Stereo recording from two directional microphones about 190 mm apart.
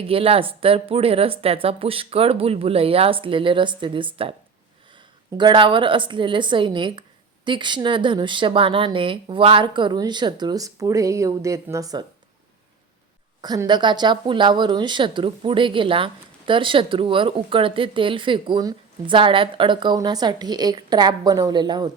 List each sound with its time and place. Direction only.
0.1 s speech: 30° right (ahead or behind)
5.4 s speech: 25° right (ahead or behind)
13.4 s speech: 20° right (ahead or behind)